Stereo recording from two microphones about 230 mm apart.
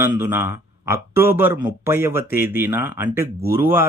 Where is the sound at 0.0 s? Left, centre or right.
Centre.